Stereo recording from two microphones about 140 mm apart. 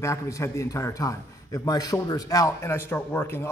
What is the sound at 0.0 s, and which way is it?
A man's voice, 20° left (ahead or behind).